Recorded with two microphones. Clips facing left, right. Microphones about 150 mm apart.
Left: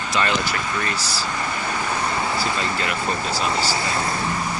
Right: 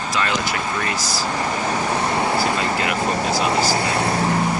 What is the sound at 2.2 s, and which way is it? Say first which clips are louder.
Vehicle: right 4 dB; 55° right (ahead or behind).